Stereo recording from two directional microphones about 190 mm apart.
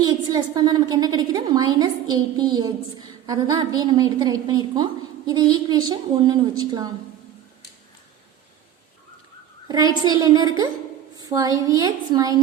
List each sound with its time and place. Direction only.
0.0 s a woman's voice: 20° right (ahead or behind)
9.6 s a woman's voice: 20° right (ahead or behind)